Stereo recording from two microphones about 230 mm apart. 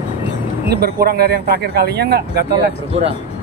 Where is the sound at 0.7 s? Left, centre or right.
Right.